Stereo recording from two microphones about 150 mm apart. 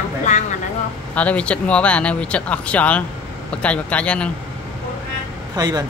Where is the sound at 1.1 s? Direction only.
10° left (ahead or behind).